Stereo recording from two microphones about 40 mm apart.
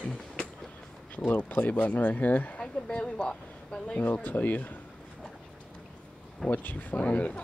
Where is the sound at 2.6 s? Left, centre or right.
Left.